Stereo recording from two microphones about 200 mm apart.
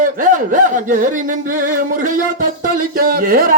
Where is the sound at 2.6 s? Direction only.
45° right (ahead or behind).